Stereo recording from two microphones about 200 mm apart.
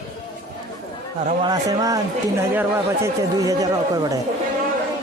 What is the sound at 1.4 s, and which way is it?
Speech, 20° right (ahead or behind).